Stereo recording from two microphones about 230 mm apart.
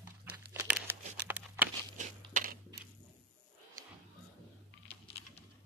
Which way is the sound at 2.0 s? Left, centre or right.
Right.